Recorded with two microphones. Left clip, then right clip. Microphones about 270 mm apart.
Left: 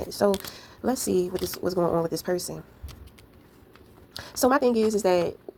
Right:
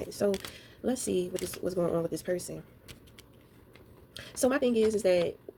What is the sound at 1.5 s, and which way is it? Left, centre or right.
Speech, left.